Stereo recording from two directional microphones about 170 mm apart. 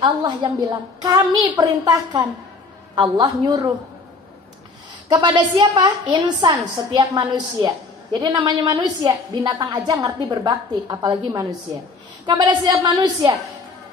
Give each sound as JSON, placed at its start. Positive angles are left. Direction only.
{"t": 0.0, "sound": "a woman's voice", "side_deg": -30}
{"t": 5.1, "sound": "a woman's voice", "side_deg": -25}